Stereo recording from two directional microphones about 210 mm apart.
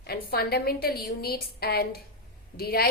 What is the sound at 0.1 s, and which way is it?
A woman's voice, 50° left (ahead or behind).